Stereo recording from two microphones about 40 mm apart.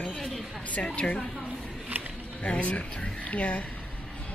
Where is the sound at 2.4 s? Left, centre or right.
Left.